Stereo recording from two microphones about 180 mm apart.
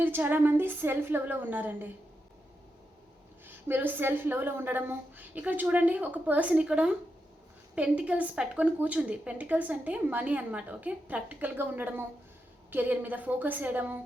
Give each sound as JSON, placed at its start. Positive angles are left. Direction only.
{"t": 0.0, "sound": "a woman's voice", "side_deg": -10}
{"t": 3.4, "sound": "a woman's voice", "side_deg": -10}